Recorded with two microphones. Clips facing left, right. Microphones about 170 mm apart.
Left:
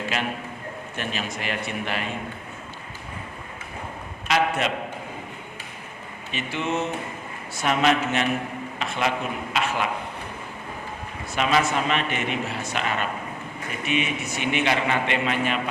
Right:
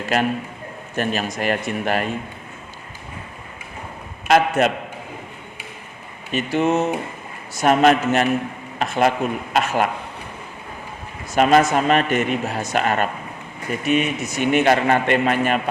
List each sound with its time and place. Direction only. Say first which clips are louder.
0.9 s a man's voice: right 9 dB; 45° right (ahead or behind)
4.3 s a man's voice: right 7 dB; 50° right (ahead or behind)
6.3 s a man's voice: right 8 dB; 40° right (ahead or behind)
11.3 s a man's voice: right 7 dB; 45° right (ahead or behind)